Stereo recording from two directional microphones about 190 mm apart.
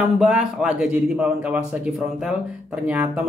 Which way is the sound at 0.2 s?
5° right (ahead or behind).